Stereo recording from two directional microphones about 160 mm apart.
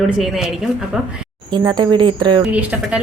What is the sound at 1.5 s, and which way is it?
Speech, 25° right (ahead or behind).